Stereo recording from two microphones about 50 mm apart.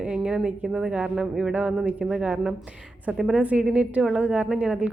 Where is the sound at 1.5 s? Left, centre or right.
Right.